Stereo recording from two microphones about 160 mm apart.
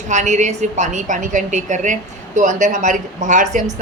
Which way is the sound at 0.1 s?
45° right (ahead or behind).